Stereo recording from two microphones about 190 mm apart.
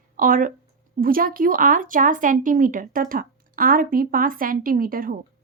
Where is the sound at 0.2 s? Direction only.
45° right (ahead or behind).